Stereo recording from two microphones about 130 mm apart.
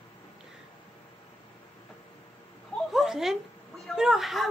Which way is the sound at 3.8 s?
5° right (ahead or behind).